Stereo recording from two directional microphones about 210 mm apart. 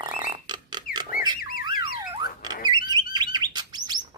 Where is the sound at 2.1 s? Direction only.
20° right (ahead or behind).